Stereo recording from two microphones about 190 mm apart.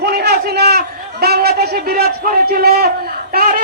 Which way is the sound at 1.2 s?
55° right (ahead or behind).